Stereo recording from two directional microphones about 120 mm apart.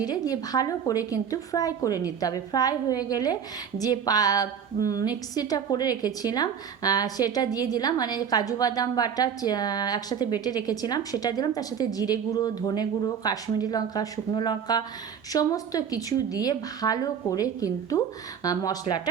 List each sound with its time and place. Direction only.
0.0 s a woman's voice: 35° left (ahead or behind)